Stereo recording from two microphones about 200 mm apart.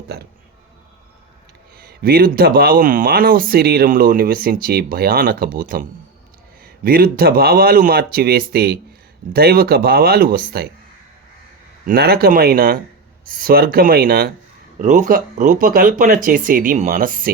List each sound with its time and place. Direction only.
1.8 s speech: 50° right (ahead or behind)
6.8 s speech: 50° right (ahead or behind)
11.9 s speech: 50° right (ahead or behind)